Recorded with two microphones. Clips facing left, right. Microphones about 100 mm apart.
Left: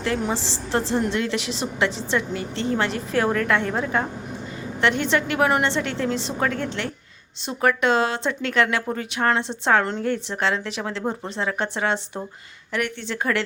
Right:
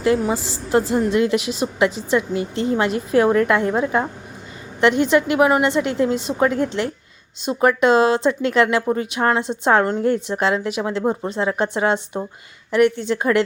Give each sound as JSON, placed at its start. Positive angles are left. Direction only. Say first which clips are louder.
{"t": 0.2, "sound": "a woman's voice", "louder": "right 4 dB", "side_deg": -10}